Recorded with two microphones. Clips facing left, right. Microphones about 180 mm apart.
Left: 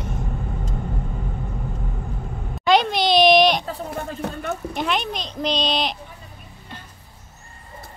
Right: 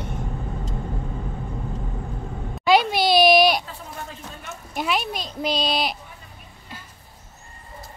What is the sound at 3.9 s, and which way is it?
Speech, 60° left (ahead or behind).